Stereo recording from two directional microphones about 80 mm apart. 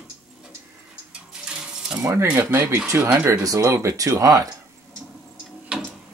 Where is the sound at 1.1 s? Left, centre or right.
Centre.